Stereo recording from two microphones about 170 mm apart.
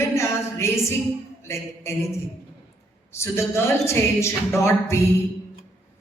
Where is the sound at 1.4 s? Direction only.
15° left (ahead or behind).